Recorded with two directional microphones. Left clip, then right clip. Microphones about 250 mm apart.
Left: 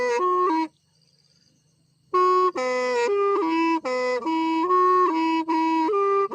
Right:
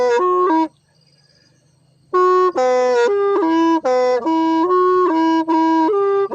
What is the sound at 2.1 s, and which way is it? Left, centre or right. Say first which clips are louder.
Music: right 5 dB; left.